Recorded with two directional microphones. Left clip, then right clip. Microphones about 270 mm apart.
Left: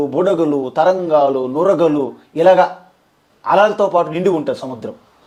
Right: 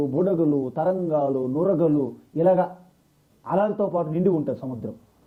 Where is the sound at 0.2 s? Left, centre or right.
Centre.